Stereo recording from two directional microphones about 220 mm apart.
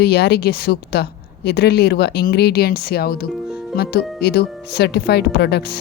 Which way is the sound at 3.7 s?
45° left (ahead or behind).